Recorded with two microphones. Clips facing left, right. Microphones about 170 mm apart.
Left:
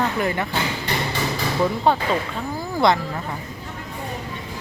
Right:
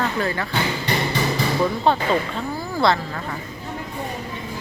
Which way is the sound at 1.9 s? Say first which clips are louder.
Right 1 dB; 10° left (ahead or behind).